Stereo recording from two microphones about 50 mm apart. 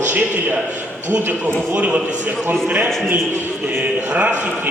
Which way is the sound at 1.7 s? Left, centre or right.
Right.